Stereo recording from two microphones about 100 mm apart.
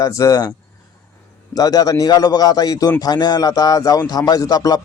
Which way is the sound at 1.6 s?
40° left (ahead or behind).